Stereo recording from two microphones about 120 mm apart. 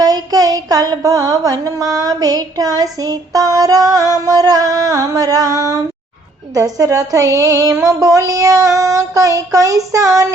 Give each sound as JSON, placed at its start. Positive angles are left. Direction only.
{"t": 0.0, "sound": "child singing", "side_deg": -30}